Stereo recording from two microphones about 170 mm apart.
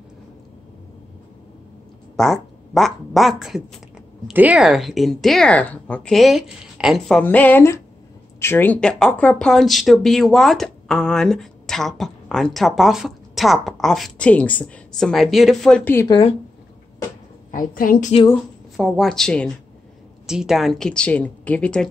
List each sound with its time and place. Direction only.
2.1 s speech: centre (ahead or behind)
16.1 s speech: 30° left (ahead or behind)
17.5 s a woman's voice: 55° left (ahead or behind)
18.8 s speech: centre (ahead or behind)